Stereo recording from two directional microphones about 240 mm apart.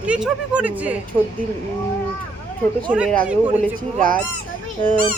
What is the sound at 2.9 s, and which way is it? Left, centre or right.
Speech, centre.